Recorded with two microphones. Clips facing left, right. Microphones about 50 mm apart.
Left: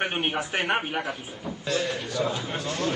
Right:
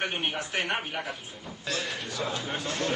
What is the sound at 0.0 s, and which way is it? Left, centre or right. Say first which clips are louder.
A man's voice: left 4 dB; centre.